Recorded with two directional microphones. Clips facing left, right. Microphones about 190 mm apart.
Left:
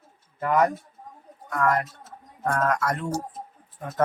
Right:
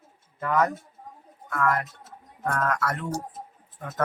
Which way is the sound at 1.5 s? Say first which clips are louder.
Left 2 dB; 35° left (ahead or behind).